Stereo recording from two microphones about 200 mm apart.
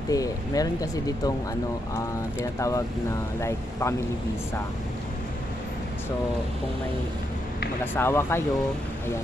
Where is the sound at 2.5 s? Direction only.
15° left (ahead or behind).